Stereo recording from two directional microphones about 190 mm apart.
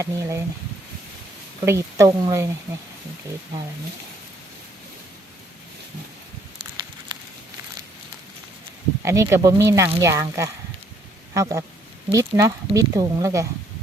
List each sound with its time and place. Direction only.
0.0 s speech: 15° right (ahead or behind)
1.6 s speech: 15° right (ahead or behind)
7.1 s a sound: 25° right (ahead or behind)
9.0 s speech: 15° right (ahead or behind)